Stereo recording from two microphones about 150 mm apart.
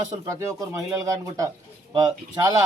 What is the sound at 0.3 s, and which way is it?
A man's voice, 20° right (ahead or behind).